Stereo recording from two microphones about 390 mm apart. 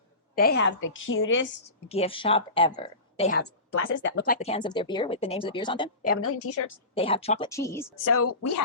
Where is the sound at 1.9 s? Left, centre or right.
Centre.